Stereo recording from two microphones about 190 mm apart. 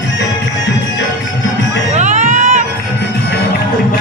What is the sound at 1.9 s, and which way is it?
Crowd, 40° right (ahead or behind).